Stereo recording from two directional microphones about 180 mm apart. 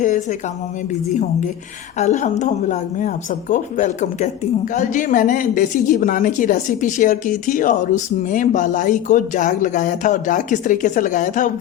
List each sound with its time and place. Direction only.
0.0 s speech: 45° left (ahead or behind)
2.0 s a woman's voice: 40° left (ahead or behind)